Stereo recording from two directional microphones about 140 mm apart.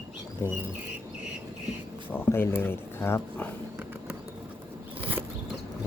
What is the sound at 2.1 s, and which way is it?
Speech, 15° left (ahead or behind).